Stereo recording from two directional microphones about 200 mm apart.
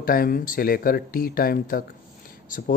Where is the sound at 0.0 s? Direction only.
45° left (ahead or behind).